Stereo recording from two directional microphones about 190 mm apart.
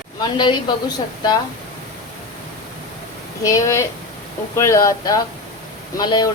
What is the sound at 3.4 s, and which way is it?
A woman's voice, 15° left (ahead or behind).